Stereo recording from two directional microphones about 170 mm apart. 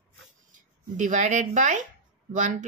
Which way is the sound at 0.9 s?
45° right (ahead or behind).